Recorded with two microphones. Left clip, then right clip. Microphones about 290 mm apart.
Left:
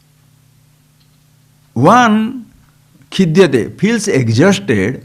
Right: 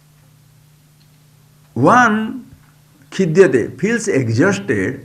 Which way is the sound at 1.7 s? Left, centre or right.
Left.